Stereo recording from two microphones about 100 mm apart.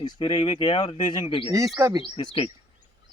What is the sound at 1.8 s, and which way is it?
Speech, 35° right (ahead or behind).